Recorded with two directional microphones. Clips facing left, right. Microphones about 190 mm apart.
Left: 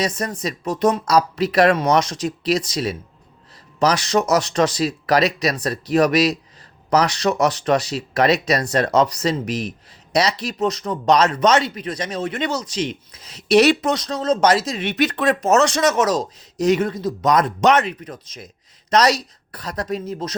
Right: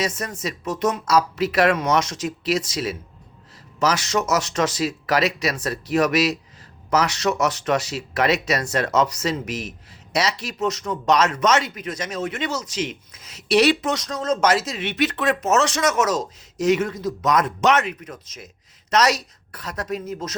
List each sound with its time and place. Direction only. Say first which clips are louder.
0.0 s speech: left 3 dB; 35° left (ahead or behind)